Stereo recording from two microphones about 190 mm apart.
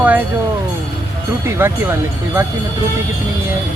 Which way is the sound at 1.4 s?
10° right (ahead or behind).